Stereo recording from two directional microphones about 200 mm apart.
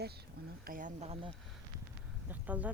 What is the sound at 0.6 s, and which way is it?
Speech, 40° right (ahead or behind).